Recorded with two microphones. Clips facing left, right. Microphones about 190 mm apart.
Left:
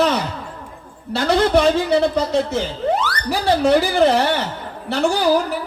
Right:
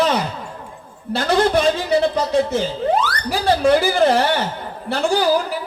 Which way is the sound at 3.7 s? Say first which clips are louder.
Even; 60° left (ahead or behind).